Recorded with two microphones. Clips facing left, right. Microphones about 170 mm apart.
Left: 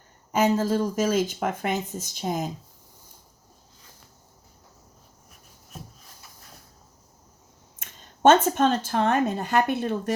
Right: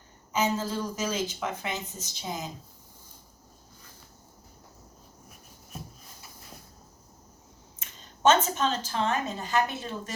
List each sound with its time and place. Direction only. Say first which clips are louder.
0.3 s speech: left 6 dB; 55° left (ahead or behind)
7.8 s speech: left 6 dB; 55° left (ahead or behind)